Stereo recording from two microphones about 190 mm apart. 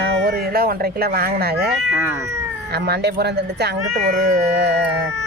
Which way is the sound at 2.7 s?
60° right (ahead or behind).